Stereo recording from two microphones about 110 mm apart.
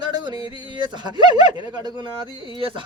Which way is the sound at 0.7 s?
40° right (ahead or behind).